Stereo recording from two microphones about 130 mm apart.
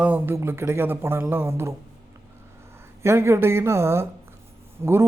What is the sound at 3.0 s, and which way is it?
A man's voice, 20° right (ahead or behind).